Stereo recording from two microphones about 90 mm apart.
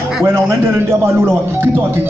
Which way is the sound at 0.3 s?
25° right (ahead or behind).